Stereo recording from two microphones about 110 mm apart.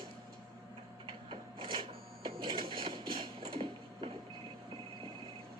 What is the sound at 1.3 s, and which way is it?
Printer, 55° right (ahead or behind).